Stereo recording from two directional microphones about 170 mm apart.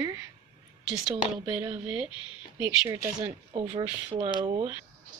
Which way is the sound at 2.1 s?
30° left (ahead or behind).